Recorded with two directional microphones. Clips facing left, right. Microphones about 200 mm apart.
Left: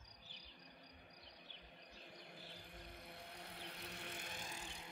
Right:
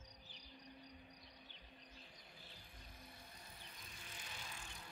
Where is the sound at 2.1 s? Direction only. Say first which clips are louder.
Left 5 dB; 65° left (ahead or behind).